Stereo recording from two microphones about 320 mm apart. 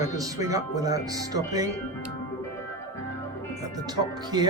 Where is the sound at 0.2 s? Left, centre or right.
Centre.